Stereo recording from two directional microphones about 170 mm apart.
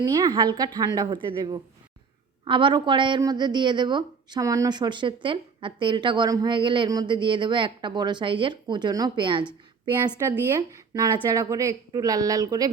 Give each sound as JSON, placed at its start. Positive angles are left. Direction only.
{"t": 0.0, "sound": "a woman's voice", "side_deg": -25}
{"t": 10.2, "sound": "a woman's voice", "side_deg": -15}